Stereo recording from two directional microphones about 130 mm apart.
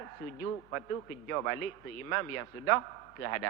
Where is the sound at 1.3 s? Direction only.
20° left (ahead or behind).